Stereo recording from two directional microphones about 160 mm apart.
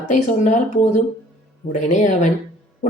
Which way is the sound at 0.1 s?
50° left (ahead or behind).